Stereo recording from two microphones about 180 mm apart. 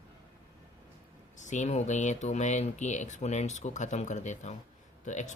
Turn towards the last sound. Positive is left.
turn(degrees=40)  # may be behind; listen again after turning